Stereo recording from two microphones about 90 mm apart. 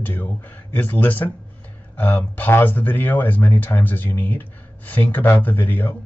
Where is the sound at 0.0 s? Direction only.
20° left (ahead or behind).